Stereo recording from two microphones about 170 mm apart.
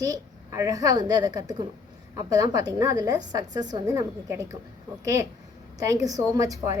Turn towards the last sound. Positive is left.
turn(degrees=-20)  # may be behind; listen again after turning